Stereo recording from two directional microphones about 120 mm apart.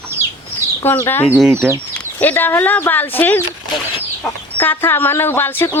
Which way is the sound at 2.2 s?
15° left (ahead or behind).